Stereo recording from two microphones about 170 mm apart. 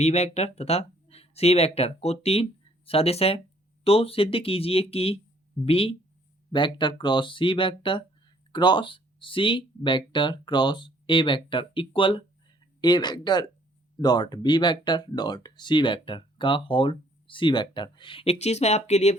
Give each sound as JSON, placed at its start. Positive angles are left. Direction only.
{"t": 0.0, "sound": "speech", "side_deg": 40}